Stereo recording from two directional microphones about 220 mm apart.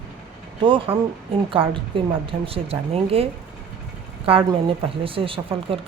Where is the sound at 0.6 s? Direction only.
25° right (ahead or behind).